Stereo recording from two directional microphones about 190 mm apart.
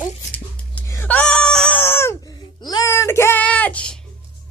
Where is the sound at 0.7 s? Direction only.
10° left (ahead or behind).